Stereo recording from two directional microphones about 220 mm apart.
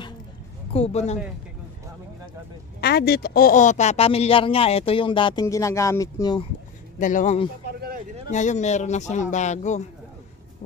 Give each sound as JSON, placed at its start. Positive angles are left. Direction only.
{"t": 0.7, "sound": "speech", "side_deg": 30}
{"t": 2.8, "sound": "speech", "side_deg": 45}
{"t": 7.0, "sound": "speech", "side_deg": 35}
{"t": 7.6, "sound": "a sound", "side_deg": -45}
{"t": 8.3, "sound": "speech", "side_deg": 35}